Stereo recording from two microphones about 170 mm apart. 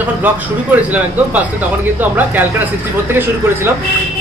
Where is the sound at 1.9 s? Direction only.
10° right (ahead or behind).